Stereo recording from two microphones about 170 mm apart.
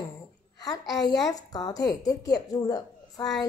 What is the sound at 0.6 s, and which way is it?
A woman's voice, 20° left (ahead or behind).